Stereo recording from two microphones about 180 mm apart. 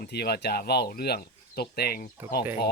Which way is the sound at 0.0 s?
65° left (ahead or behind).